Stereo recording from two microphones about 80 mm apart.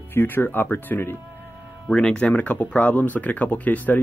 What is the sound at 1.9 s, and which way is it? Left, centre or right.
Speech, centre.